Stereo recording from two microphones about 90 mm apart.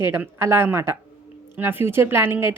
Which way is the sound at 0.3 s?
25° right (ahead or behind).